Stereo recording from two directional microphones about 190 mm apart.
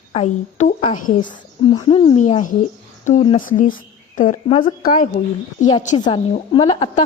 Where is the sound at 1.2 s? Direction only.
25° left (ahead or behind).